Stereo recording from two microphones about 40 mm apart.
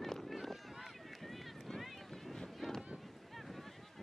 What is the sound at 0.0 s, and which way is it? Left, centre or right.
Run, centre.